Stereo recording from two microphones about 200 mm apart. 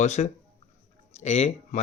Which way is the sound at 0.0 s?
35° left (ahead or behind).